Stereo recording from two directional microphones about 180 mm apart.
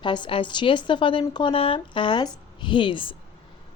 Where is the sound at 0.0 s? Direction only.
25° left (ahead or behind).